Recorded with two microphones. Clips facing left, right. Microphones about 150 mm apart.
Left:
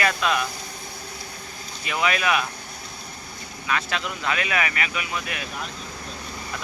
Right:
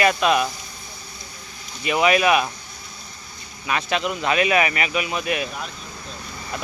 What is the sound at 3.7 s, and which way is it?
Speech, 20° right (ahead or behind).